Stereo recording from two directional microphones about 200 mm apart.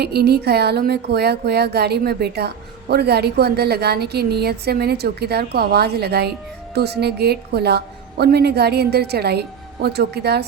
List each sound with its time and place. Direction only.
0.0 s a woman's voice: 55° right (ahead or behind)